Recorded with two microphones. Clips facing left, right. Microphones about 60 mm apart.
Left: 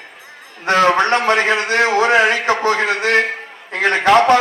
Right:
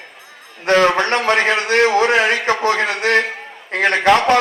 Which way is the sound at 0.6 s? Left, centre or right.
Left.